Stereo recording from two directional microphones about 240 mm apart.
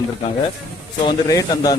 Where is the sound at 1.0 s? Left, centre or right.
Centre.